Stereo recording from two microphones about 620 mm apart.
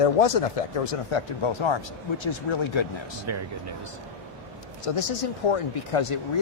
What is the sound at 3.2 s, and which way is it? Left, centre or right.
Speech, right.